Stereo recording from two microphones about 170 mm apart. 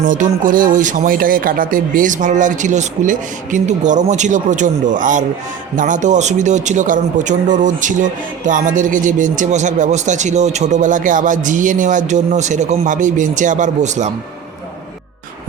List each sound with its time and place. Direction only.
0.1 s a man's voice: 50° right (ahead or behind)